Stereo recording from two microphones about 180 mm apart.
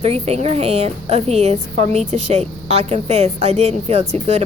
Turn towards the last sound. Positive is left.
turn(degrees=-35)  # may be behind; listen again after turning